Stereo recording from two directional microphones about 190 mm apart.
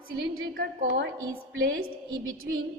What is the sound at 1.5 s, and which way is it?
Speech, 90° right.